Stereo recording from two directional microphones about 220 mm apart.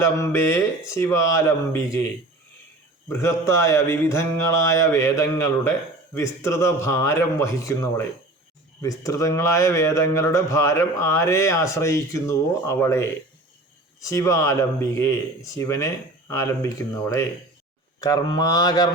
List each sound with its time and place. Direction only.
0.0 s a man's voice: 10° left (ahead or behind)
3.1 s a man's voice: 10° left (ahead or behind)